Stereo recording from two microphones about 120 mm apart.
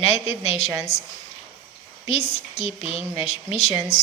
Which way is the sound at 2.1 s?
60° left (ahead or behind).